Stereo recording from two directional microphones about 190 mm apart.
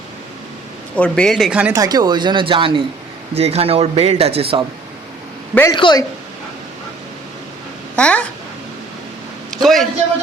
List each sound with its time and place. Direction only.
0.9 s speech: 5° left (ahead or behind)
1.8 s a man's voice: 20° right (ahead or behind)
5.7 s speech: 20° left (ahead or behind)
7.9 s a child's voice: 5° left (ahead or behind)
9.5 s a sound: centre (ahead or behind)